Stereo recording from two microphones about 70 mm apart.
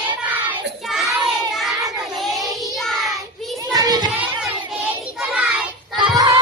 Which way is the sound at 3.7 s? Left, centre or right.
Right.